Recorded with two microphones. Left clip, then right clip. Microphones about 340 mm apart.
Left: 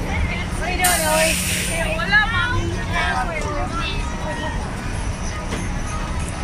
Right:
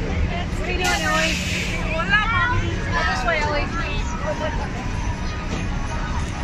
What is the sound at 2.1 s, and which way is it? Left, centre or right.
Vehicle, centre.